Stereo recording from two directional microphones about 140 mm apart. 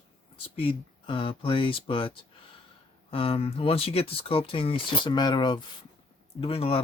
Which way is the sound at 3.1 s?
40° left (ahead or behind).